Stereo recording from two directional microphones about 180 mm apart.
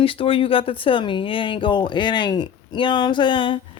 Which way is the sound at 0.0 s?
30° left (ahead or behind).